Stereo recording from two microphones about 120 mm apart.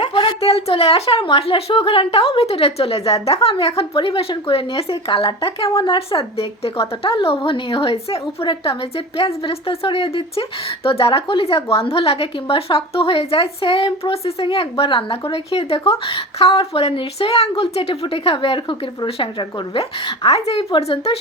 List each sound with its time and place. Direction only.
0.3 s a woman's voice: 55° left (ahead or behind)